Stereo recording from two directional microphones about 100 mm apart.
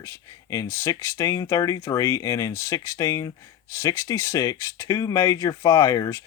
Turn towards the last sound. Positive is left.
turn(degrees=35)  # may be behind; listen again after turning